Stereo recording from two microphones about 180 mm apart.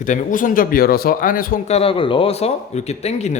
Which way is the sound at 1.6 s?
35° left (ahead or behind).